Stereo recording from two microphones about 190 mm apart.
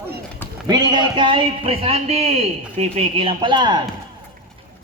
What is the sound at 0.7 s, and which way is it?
A man's voice, 20° right (ahead or behind).